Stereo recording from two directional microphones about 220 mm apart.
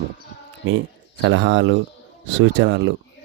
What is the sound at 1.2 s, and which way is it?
Speech, 55° right (ahead or behind).